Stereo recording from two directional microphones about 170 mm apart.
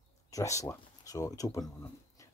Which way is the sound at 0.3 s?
20° left (ahead or behind).